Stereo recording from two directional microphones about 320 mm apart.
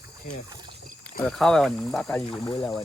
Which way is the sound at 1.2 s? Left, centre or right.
Centre.